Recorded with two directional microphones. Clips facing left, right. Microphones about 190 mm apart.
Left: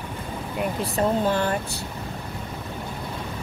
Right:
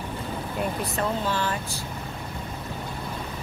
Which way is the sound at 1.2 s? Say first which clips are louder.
Left 4 dB; 50° left (ahead or behind).